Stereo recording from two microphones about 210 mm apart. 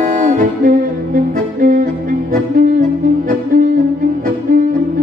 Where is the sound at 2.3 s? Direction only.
40° right (ahead or behind).